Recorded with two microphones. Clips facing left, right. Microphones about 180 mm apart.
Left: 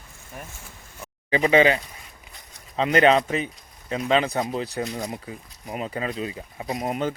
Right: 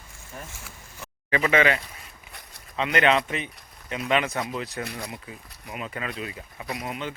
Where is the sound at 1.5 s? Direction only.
30° left (ahead or behind).